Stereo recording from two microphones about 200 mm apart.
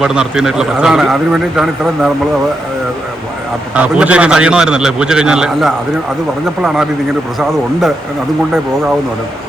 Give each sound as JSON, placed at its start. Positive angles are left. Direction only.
{"t": 0.0, "sound": "a man's voice", "side_deg": -5}
{"t": 3.8, "sound": "a man's voice", "side_deg": -5}